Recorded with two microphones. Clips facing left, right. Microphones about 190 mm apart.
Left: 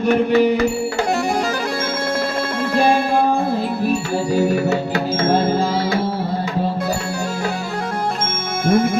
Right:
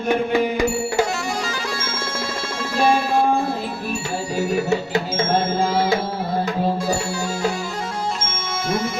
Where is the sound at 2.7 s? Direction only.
55° left (ahead or behind).